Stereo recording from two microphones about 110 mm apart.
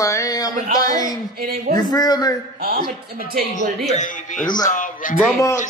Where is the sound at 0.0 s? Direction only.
30° left (ahead or behind).